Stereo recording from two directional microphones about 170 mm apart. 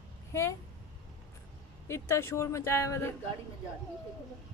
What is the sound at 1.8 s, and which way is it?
Speech, 15° left (ahead or behind).